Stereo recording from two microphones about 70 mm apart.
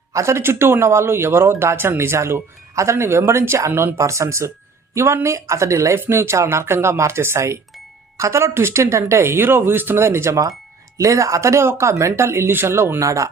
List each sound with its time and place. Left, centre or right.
0.1 s speech: right
3.9 s speech: right
10.9 s speech: right
13.0 s speech: right